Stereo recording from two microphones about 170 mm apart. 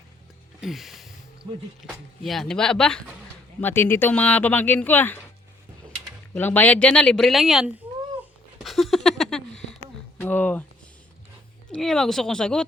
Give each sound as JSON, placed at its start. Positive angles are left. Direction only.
{"t": 0.6, "sound": "a sound", "side_deg": 0}
{"t": 1.5, "sound": "speech", "side_deg": -25}
{"t": 2.2, "sound": "speech", "side_deg": 0}
{"t": 6.3, "sound": "speech", "side_deg": 10}
{"t": 8.6, "sound": "a sound", "side_deg": 0}
{"t": 11.7, "sound": "speech", "side_deg": 0}